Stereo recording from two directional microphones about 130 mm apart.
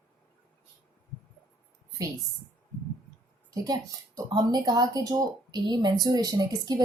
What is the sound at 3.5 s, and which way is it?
Speech, 30° right (ahead or behind).